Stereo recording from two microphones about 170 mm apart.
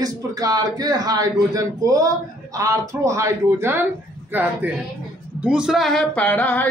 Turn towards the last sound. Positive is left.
turn(degrees=10)  # may be behind; listen again after turning